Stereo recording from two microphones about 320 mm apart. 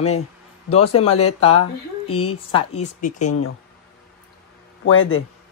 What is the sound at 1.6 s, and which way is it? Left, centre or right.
Speech, left.